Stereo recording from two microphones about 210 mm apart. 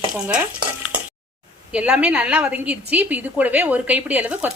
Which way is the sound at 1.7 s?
5° right (ahead or behind).